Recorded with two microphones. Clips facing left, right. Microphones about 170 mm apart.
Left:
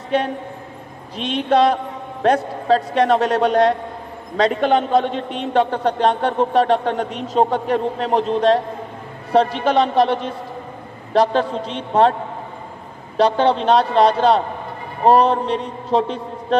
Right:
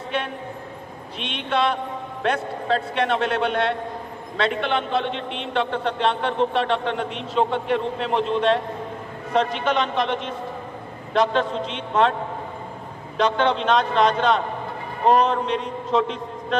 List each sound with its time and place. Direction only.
0.1 s a man's voice: 35° left (ahead or behind)
13.2 s a man's voice: 35° left (ahead or behind)